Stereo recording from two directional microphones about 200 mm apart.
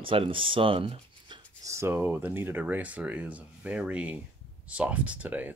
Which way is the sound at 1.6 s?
15° right (ahead or behind).